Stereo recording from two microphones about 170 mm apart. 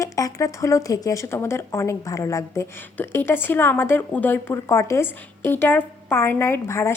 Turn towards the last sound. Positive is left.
turn(degrees=15)  # may be behind; listen again after turning